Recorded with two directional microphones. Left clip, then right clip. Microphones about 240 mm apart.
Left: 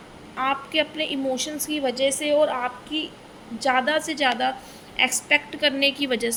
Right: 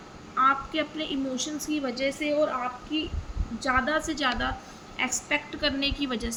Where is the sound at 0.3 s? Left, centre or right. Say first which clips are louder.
Even; centre.